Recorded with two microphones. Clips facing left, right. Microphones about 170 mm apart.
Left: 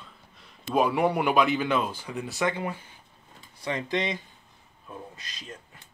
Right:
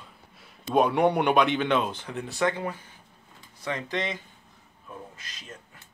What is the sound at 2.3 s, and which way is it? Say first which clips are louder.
Speech: right 2 dB; 15° left (ahead or behind).